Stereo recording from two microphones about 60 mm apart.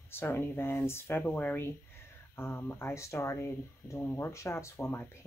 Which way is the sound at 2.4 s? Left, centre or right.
Left.